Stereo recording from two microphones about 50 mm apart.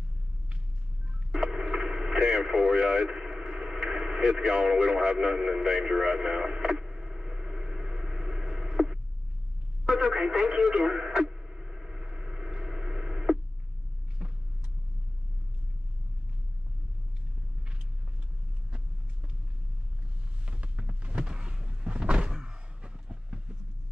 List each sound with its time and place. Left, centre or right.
1.3 s radio: centre
14.2 s vehicle: right
20.4 s a sound: right